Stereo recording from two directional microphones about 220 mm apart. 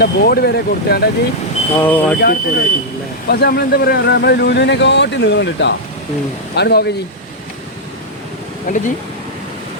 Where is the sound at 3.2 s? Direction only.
45° left (ahead or behind).